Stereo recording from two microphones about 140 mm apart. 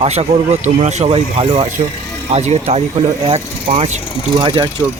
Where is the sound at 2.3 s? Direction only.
50° right (ahead or behind).